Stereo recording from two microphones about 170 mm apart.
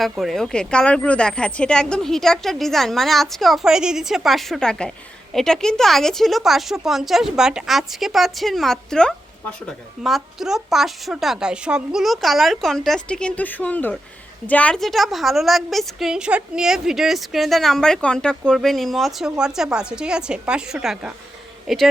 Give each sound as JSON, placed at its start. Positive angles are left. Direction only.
{"t": 0.0, "sound": "speech", "side_deg": 0}